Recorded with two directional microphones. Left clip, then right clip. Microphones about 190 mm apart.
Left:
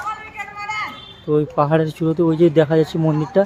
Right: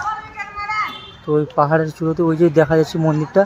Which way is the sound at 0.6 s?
55° left (ahead or behind).